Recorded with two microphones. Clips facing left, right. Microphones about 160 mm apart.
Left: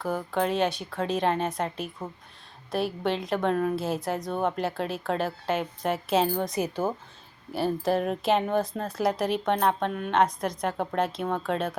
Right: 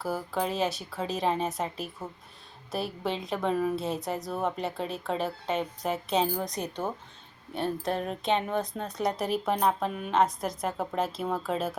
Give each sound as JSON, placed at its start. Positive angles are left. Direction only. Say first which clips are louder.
{"t": 0.0, "sound": "a woman's voice", "louder": "left 3 dB", "side_deg": -5}